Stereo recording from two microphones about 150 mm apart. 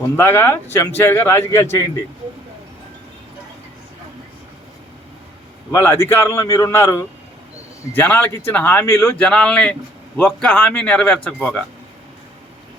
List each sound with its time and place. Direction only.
0.2 s speech: 15° left (ahead or behind)
5.7 s speech: 20° left (ahead or behind)